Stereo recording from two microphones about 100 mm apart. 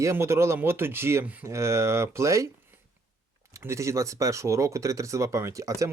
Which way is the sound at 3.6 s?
30° right (ahead or behind).